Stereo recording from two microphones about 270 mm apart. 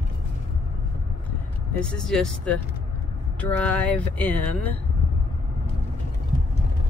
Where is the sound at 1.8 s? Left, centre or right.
Centre.